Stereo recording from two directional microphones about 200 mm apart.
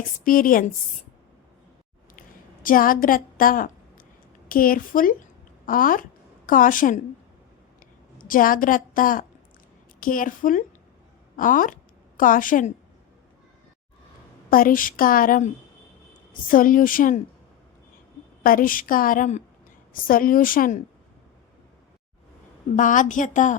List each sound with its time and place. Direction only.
0.3 s a woman's voice: 45° left (ahead or behind)
2.6 s a woman's voice: 45° left (ahead or behind)
8.2 s a woman's voice: 45° left (ahead or behind)
14.5 s a woman's voice: 45° left (ahead or behind)
18.4 s a woman's voice: 45° left (ahead or behind)
22.7 s a woman's voice: 40° left (ahead or behind)